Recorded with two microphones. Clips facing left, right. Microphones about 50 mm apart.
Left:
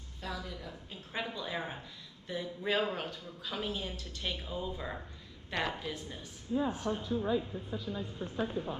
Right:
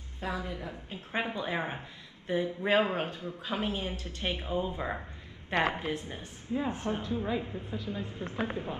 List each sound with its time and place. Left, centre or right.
0.2 s speech: right